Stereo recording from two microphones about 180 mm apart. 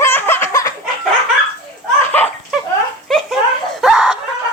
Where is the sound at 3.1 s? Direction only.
Centre (ahead or behind).